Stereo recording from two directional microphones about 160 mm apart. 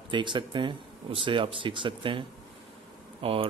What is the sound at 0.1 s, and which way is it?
Speech, 30° right (ahead or behind).